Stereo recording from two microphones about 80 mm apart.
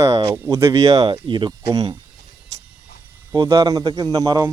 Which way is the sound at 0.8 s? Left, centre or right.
Right.